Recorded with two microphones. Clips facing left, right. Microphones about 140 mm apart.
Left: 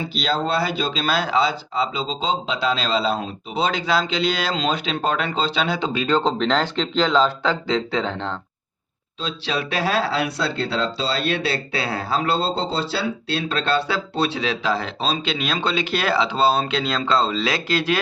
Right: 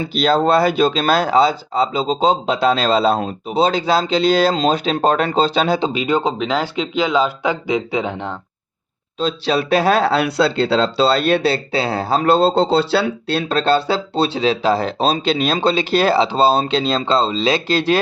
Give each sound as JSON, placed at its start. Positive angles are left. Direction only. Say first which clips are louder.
{"t": 0.1, "sound": "speech", "louder": "right 9 dB", "side_deg": -50}
{"t": 3.5, "sound": "speech", "louder": "right 5 dB", "side_deg": -35}
{"t": 5.9, "sound": "speech", "louder": "right 2 dB", "side_deg": -15}
{"t": 9.2, "sound": "speech", "louder": "right 8 dB", "side_deg": -40}
{"t": 11.4, "sound": "speech", "louder": "right 6 dB", "side_deg": -30}
{"t": 12.2, "sound": "speech", "louder": "right 12 dB", "side_deg": -55}
{"t": 13.6, "sound": "speech", "louder": "right 6 dB", "side_deg": -30}